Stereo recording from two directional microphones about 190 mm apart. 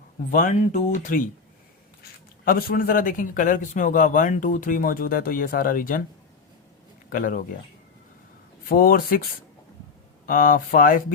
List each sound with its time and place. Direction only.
0.3 s speech: 40° left (ahead or behind)
2.4 s speech: 50° left (ahead or behind)
7.1 s speech: 45° left (ahead or behind)
8.7 s speech: 50° left (ahead or behind)
10.2 s speech: 45° left (ahead or behind)